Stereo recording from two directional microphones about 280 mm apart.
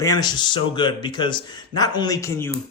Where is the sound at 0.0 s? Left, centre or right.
Centre.